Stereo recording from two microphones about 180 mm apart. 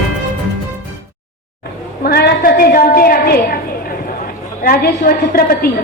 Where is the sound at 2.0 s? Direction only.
55° left (ahead or behind).